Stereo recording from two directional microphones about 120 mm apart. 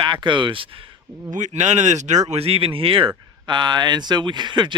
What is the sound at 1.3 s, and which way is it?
Speech, 80° right.